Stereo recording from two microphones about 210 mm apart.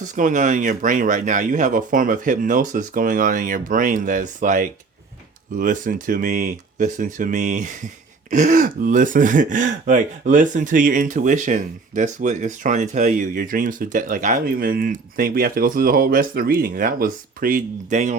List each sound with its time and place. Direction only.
0.2 s speech: 40° right (ahead or behind)